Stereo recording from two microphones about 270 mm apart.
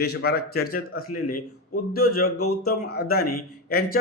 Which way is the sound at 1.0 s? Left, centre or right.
Left.